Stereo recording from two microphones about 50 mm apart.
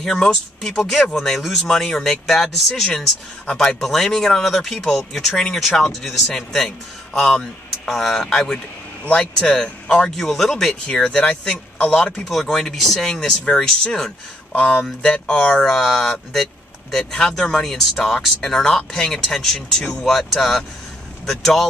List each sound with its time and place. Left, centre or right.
0.0 s speech: centre
17.0 s speech: centre